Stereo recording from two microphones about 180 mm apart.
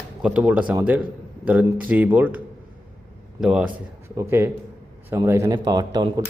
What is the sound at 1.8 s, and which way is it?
Speech, 10° right (ahead or behind).